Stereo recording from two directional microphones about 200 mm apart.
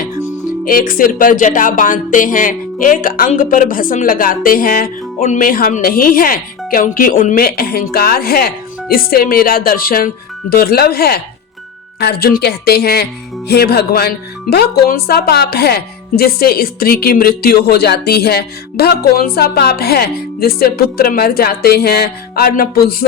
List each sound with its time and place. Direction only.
0.6 s speech: 45° left (ahead or behind)